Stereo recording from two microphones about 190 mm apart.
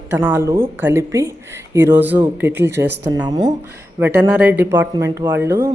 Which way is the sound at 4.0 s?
10° right (ahead or behind).